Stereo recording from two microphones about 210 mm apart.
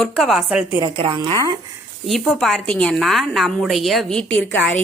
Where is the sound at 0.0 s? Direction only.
Centre (ahead or behind).